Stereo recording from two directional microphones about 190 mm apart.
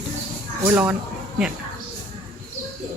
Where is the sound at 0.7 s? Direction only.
10° right (ahead or behind).